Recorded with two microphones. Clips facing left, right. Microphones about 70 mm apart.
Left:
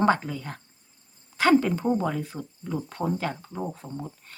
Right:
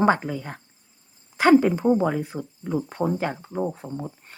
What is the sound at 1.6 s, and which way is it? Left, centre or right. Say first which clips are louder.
A woman's voice: right 5 dB; centre.